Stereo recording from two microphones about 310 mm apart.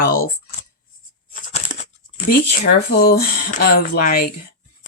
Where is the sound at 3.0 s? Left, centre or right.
Left.